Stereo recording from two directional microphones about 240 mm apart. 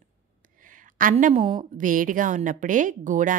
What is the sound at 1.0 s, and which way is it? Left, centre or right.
A woman's voice, right.